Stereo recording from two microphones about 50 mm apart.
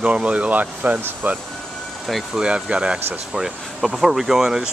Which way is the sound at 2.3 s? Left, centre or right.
Right.